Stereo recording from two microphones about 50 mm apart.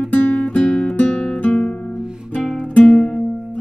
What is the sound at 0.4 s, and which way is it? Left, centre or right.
Music, left.